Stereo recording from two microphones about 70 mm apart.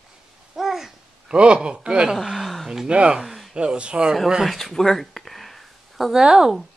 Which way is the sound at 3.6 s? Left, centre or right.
Centre.